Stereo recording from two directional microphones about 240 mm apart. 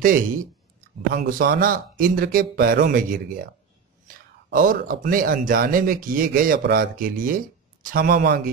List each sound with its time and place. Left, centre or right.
0.0 s speech: right
4.5 s speech: right